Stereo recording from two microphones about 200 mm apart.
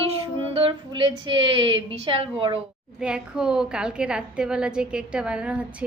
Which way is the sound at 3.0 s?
5° right (ahead or behind).